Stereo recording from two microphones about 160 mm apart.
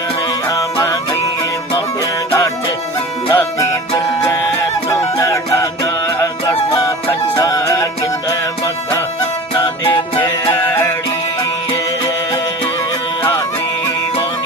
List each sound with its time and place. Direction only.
0.4 s music: 20° left (ahead or behind)
3.3 s music: 20° left (ahead or behind)
10.2 s music: 25° left (ahead or behind)